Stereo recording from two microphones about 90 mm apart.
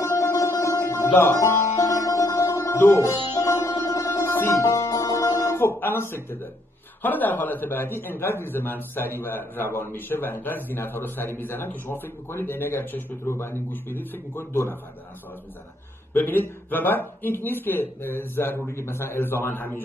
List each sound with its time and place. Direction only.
0.0 s music: 35° left (ahead or behind)
4.2 s music: 25° left (ahead or behind)
5.6 s a man's voice: 25° left (ahead or behind)
16.1 s a man's voice: 20° left (ahead or behind)